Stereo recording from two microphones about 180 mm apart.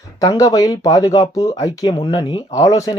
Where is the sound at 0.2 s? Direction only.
20° left (ahead or behind).